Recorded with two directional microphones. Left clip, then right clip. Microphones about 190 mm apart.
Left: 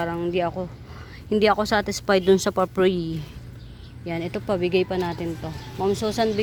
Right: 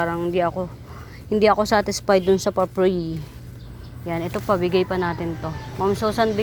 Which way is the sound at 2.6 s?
25° left (ahead or behind).